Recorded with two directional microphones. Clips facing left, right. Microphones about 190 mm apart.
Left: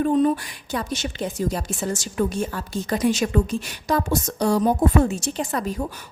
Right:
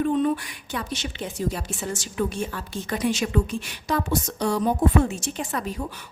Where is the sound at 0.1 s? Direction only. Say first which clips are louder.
Left 3 dB; 40° left (ahead or behind).